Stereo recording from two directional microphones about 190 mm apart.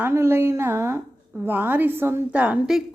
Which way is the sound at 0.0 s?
15° right (ahead or behind).